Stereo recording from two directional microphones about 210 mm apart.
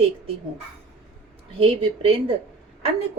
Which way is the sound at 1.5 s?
25° right (ahead or behind).